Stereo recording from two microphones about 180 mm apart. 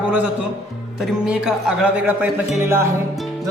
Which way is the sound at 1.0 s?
Centre (ahead or behind).